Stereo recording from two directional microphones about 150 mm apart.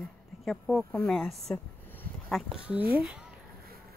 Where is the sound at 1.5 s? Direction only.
15° left (ahead or behind).